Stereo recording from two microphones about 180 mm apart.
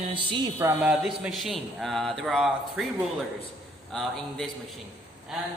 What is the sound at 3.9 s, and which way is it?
Speech, centre (ahead or behind).